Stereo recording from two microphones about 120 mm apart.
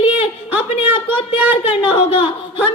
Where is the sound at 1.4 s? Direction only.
15° right (ahead or behind).